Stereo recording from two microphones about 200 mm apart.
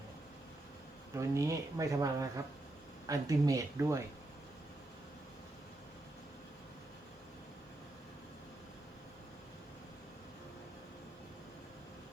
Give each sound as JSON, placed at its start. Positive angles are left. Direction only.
{"t": 1.1, "sound": "speech", "side_deg": -15}